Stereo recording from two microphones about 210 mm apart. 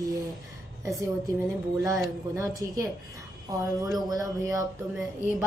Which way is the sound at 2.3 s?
15° right (ahead or behind).